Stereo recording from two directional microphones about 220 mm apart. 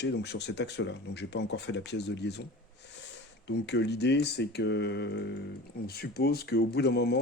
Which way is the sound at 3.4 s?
50° left (ahead or behind).